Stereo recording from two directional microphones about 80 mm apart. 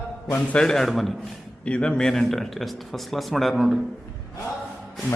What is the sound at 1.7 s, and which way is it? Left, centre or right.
Speech, centre.